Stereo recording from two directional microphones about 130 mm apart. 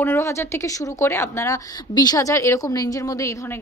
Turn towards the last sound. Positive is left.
turn(degrees=25)  # may be behind; listen again after turning